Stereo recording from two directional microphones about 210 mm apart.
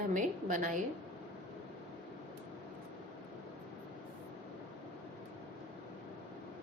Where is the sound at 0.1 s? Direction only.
40° right (ahead or behind).